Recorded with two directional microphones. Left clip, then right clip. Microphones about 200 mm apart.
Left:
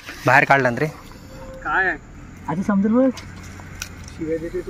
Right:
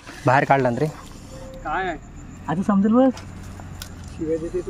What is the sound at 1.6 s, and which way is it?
Speech, 40° right (ahead or behind).